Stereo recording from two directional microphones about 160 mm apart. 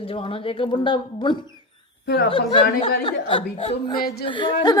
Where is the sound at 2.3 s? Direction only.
35° left (ahead or behind).